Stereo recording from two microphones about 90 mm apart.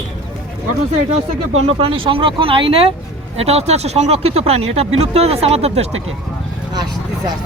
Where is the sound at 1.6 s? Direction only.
85° right.